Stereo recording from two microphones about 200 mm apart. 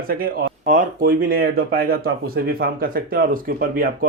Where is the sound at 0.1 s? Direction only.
45° right (ahead or behind).